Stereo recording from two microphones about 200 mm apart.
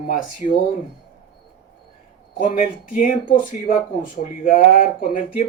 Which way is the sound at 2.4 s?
40° left (ahead or behind).